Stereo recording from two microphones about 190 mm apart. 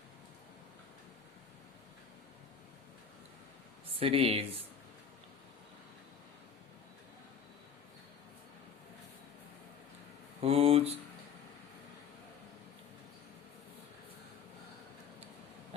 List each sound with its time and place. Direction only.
4.0 s speech: 30° right (ahead or behind)
10.4 s mantra: 30° right (ahead or behind)